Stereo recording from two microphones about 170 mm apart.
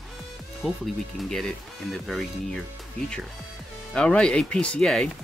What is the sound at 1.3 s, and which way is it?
Speech, centre (ahead or behind).